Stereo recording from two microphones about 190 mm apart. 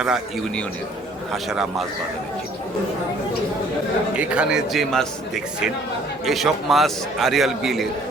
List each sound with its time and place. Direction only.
0.0 s a man's voice: 5° right (ahead or behind)
4.1 s a man's voice: 5° right (ahead or behind)